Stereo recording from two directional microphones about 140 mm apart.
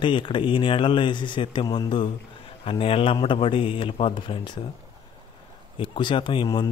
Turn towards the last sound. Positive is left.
turn(degrees=35)  # may be behind; listen again after turning